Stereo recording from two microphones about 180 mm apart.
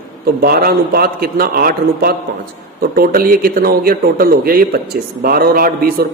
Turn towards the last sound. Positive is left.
turn(degrees=-55)  # may be behind; listen again after turning